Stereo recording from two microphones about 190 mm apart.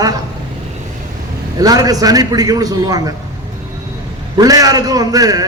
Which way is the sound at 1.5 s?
20° right (ahead or behind).